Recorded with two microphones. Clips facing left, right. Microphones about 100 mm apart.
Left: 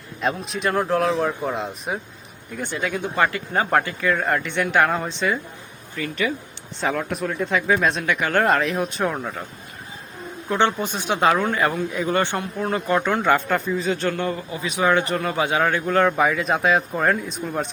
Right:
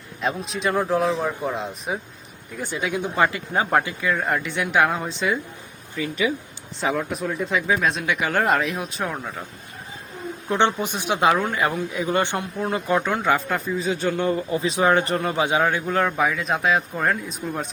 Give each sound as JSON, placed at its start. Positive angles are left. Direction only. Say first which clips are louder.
{"t": 0.2, "sound": "a man's voice", "louder": "left 1 dB", "side_deg": 0}
{"t": 3.5, "sound": "a man's voice", "louder": "left 1 dB", "side_deg": -5}
{"t": 10.5, "sound": "speech", "louder": "even", "side_deg": -20}
{"t": 14.1, "sound": "speech", "louder": "right 2 dB", "side_deg": -20}
{"t": 14.3, "sound": "speech", "louder": "right 4 dB", "side_deg": -30}
{"t": 15.2, "sound": "a man's voice", "louder": "even", "side_deg": -20}